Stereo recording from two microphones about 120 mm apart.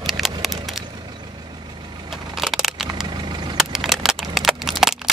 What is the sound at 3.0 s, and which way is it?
Vehicle, 40° right (ahead or behind).